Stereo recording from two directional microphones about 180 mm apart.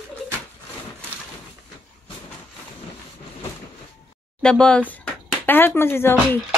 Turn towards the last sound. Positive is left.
turn(degrees=15)  # may be behind; listen again after turning